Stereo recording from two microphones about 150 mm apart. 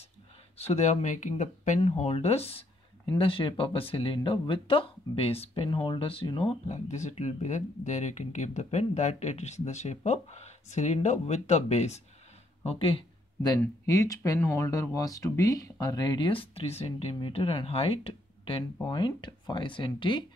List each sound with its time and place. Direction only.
0.6 s speech: 45° left (ahead or behind)
1.8 s speech: 40° left (ahead or behind)
6.7 s speech: 50° left (ahead or behind)
12.6 s a sound: 40° left (ahead or behind)
13.8 s speech: 20° left (ahead or behind)